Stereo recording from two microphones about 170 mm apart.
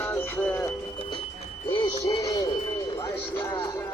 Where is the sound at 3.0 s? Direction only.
15° left (ahead or behind).